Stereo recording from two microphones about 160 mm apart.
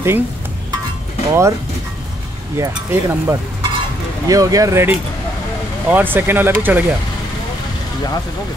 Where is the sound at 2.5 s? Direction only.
15° right (ahead or behind).